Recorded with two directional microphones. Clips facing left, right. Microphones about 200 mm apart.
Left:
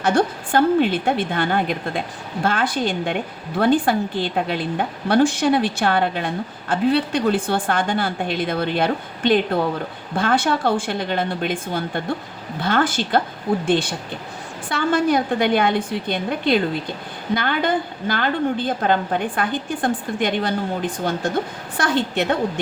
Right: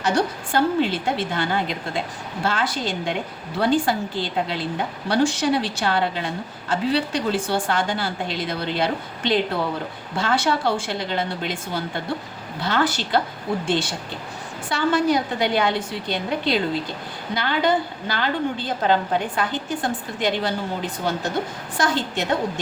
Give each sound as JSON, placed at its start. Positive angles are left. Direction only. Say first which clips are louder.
{"t": 0.0, "sound": "a woman's voice", "louder": "left 3 dB", "side_deg": 55}